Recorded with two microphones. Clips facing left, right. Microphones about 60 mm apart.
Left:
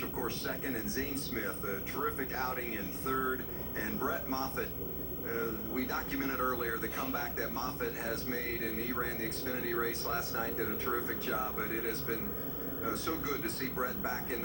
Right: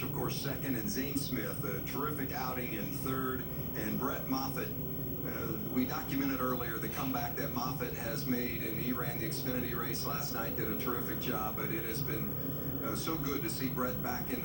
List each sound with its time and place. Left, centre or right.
3.8 s speech: left
5.7 s speech: left
9.5 s speech: left
13.7 s speech: left